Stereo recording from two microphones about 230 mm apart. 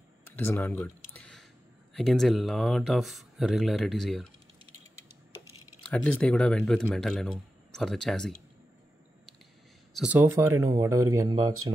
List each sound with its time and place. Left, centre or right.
0.2 s a sound: centre
2.0 s speech: centre
5.9 s speech: centre
9.9 s speech: centre